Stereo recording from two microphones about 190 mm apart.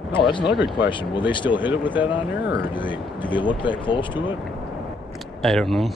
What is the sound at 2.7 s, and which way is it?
Speech, 25° left (ahead or behind).